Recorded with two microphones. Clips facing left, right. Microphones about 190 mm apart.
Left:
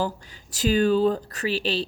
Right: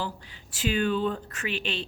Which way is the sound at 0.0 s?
45° left (ahead or behind).